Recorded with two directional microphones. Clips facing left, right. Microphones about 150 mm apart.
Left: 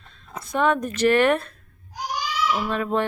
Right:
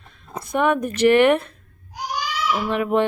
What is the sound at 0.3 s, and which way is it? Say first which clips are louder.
A woman's voice: right 2 dB; 15° right (ahead or behind).